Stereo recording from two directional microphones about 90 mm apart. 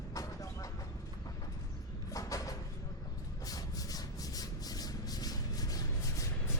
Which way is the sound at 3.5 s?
45° left (ahead or behind).